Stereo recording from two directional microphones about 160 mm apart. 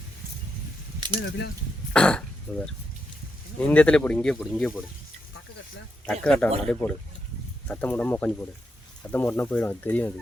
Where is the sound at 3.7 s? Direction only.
5° left (ahead or behind).